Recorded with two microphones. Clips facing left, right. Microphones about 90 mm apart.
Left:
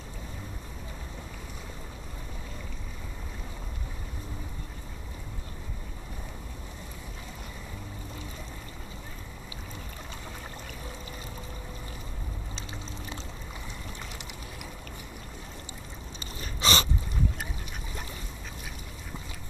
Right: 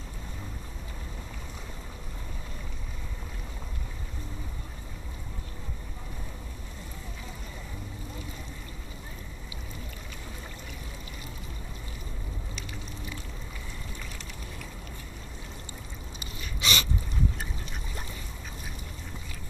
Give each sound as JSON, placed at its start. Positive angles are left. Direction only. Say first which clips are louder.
{"t": 16.3, "sound": "dog", "louder": "left 4 dB", "side_deg": 35}